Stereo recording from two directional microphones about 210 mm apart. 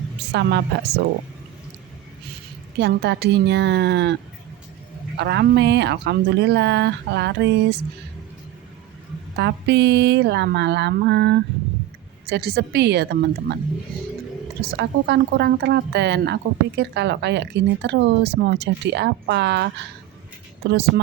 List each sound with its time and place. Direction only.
0.3 s speech: 50° right (ahead or behind)
2.7 s speech: 55° right (ahead or behind)
9.3 s speech: 55° right (ahead or behind)
14.8 s speech: 55° right (ahead or behind)